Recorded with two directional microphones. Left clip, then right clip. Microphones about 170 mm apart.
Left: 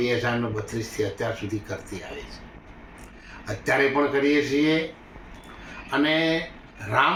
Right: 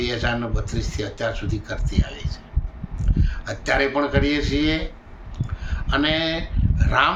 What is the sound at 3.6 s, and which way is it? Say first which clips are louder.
Speech: right 1 dB; 25° right (ahead or behind).